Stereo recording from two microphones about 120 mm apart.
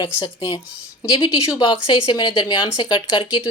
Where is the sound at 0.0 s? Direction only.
50° left (ahead or behind).